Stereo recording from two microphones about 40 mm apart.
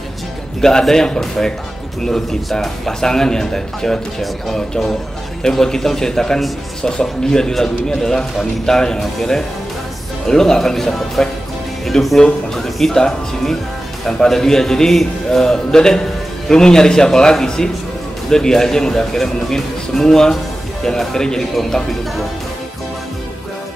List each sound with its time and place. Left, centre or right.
0.6 s speech: centre
5.4 s speech: centre